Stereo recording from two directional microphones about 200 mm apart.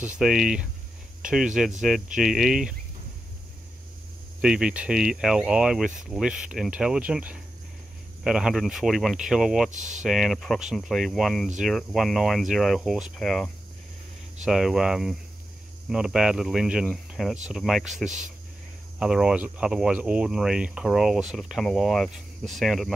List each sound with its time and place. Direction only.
0.2 s speech: centre (ahead or behind)
4.4 s speech: 5° right (ahead or behind)
9.7 s speech: 40° right (ahead or behind)
10.0 s speech: centre (ahead or behind)